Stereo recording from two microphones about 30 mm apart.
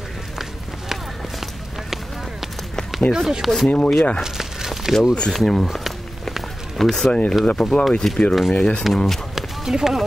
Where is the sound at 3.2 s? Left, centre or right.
Centre.